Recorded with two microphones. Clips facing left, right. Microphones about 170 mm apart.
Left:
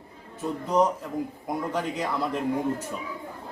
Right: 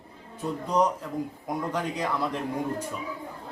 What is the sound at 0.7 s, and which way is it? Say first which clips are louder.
A man's voice: left 2 dB; 10° left (ahead or behind).